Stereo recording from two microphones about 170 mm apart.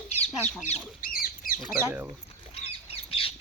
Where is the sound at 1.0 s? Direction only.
55° left (ahead or behind).